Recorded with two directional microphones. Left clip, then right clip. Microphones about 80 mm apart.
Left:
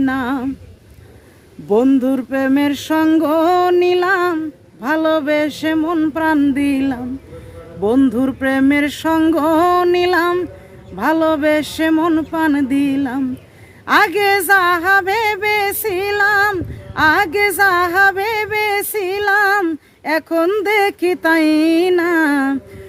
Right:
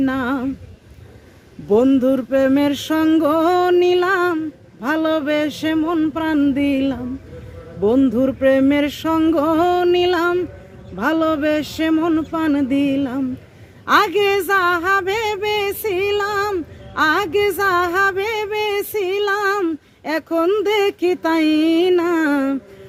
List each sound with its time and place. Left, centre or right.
0.0 s speech: left
1.7 s speech: left